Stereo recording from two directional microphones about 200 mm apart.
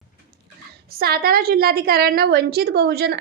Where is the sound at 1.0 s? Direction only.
50° right (ahead or behind).